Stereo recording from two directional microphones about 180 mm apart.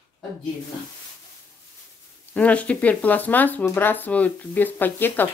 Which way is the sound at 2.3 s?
10° left (ahead or behind).